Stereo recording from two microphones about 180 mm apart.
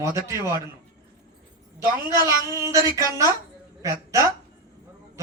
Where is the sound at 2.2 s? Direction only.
15° right (ahead or behind).